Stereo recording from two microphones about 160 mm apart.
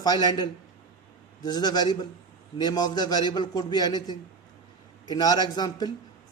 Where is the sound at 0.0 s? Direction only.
25° left (ahead or behind).